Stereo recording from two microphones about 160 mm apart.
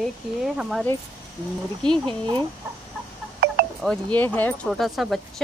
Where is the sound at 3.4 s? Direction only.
75° right (ahead or behind).